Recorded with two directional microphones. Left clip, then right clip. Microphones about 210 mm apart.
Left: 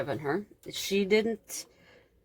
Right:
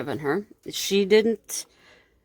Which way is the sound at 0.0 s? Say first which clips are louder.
Right 5 dB; 45° right (ahead or behind).